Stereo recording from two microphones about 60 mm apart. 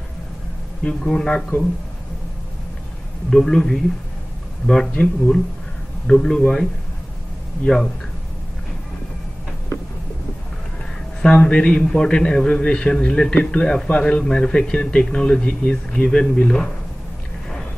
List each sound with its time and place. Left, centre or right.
1.0 s a man's voice: centre
3.3 s a man's voice: centre
11.2 s a man's voice: centre